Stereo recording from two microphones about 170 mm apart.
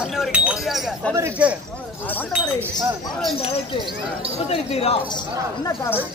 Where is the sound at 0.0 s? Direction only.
5° right (ahead or behind).